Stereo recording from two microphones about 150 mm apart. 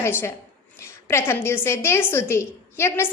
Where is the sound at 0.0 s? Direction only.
15° left (ahead or behind).